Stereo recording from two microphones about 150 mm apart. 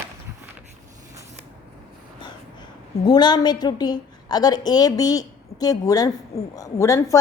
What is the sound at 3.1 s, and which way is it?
A woman's voice, 30° left (ahead or behind).